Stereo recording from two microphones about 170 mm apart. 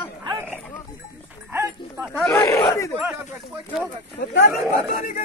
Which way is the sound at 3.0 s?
10° right (ahead or behind).